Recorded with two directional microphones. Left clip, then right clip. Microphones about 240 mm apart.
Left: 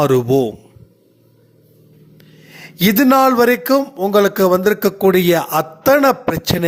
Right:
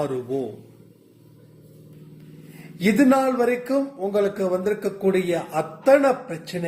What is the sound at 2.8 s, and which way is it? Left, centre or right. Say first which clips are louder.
A man's voice: left 7 dB; left.